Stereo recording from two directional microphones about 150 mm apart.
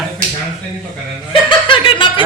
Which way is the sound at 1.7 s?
35° left (ahead or behind).